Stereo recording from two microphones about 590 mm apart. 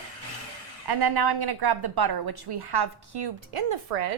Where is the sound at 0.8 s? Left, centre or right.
Right.